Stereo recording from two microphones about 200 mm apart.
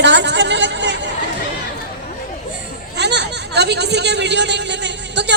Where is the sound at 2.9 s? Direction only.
60° right (ahead or behind).